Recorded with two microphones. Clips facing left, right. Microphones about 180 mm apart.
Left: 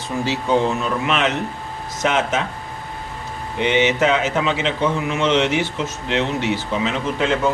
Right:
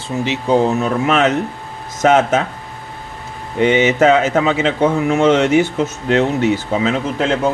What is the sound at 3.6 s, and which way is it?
A man's voice, 45° right (ahead or behind).